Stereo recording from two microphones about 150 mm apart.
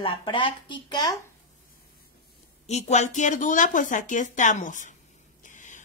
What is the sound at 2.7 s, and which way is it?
Speech, 50° left (ahead or behind).